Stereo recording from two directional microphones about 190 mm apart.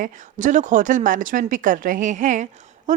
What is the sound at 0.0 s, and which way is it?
Speech, 40° right (ahead or behind).